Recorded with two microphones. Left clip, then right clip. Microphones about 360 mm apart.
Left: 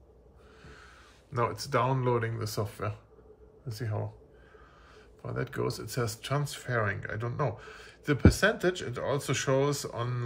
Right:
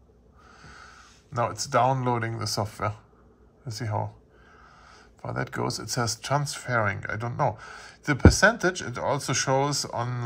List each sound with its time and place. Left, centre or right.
0.6 s speech: centre